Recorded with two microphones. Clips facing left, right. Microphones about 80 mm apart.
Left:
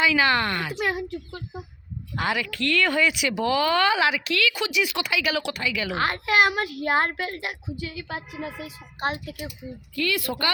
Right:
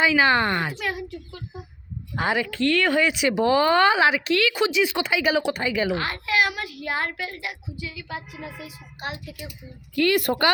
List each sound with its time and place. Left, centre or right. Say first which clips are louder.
0.2 s speech: right 2 dB; right
0.8 s a child's voice: left 3 dB; left
2.1 s speech: right 3 dB; right
5.9 s a child's voice: left 2 dB; left
9.9 s a woman's voice: right 6 dB; right